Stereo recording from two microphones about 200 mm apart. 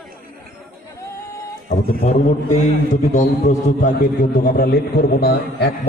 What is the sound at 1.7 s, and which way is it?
A man's voice, 35° left (ahead or behind).